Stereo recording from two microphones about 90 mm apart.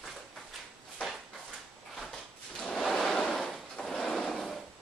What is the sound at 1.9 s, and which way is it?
Drawer open or close, 5° left (ahead or behind).